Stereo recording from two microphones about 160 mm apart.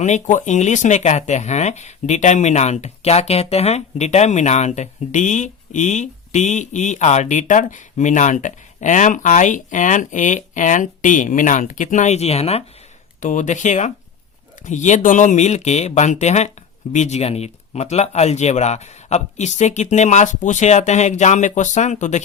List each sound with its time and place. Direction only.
0.0 s speech: 50° left (ahead or behind)
13.1 s speech: 50° left (ahead or behind)